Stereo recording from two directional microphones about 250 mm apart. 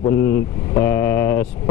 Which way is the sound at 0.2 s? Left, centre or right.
Left.